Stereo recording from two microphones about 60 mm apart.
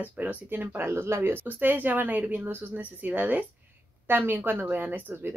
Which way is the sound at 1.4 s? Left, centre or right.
Right.